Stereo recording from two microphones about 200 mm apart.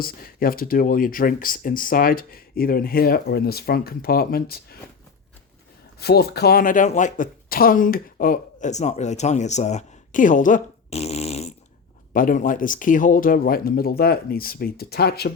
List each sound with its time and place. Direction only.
0.0 s speech: 45° left (ahead or behind)
6.0 s speech: 55° left (ahead or behind)